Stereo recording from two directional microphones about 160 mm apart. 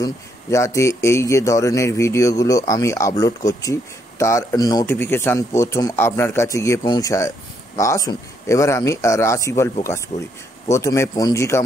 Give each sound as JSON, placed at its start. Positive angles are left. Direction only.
{"t": 0.0, "sound": "a man's voice", "side_deg": 20}
{"t": 4.8, "sound": "a man's voice", "side_deg": 15}